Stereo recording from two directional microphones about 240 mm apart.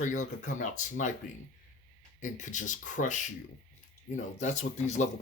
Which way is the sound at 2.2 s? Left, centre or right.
Left.